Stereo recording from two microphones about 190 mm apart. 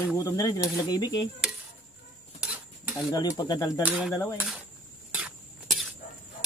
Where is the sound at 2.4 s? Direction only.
5° right (ahead or behind).